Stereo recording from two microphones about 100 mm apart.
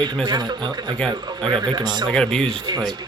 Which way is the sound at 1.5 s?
50° right (ahead or behind).